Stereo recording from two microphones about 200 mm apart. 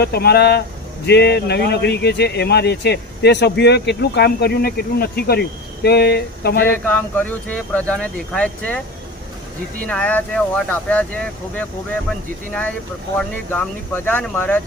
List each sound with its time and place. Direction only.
0.0 s speech: 50° left (ahead or behind)
6.7 s speech: 10° left (ahead or behind)
9.8 s speech: 5° left (ahead or behind)
13.1 s speech: 5° left (ahead or behind)